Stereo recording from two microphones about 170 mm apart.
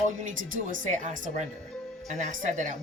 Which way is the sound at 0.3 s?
50° right (ahead or behind).